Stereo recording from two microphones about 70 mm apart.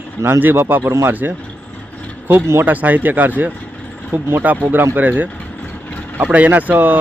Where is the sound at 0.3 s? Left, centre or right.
Right.